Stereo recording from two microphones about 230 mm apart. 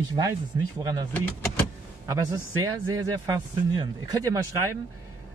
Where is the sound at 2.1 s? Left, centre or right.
Centre.